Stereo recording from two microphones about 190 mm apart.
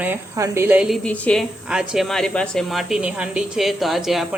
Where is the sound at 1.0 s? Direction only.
5° left (ahead or behind).